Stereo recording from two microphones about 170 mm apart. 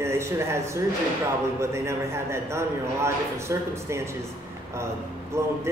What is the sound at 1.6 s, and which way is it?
Speech, 15° right (ahead or behind).